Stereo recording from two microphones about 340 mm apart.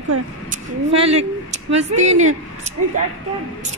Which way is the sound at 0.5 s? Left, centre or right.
Centre.